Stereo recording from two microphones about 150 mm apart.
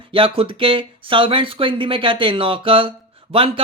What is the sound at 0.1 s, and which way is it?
Speech, 35° right (ahead or behind).